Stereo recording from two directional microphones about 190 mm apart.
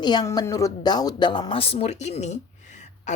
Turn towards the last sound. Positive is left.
turn(degrees=40)  # may be behind; listen again after turning